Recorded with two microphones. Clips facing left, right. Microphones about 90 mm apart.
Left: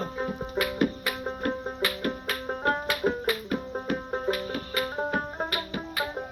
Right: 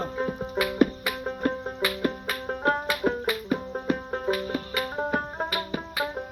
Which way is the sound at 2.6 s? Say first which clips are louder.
Right 2 dB; 5° right (ahead or behind).